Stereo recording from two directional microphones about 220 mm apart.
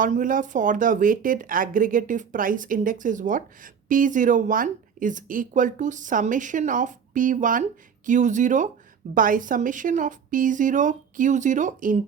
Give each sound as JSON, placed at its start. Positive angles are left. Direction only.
{"t": 0.0, "sound": "speech", "side_deg": -35}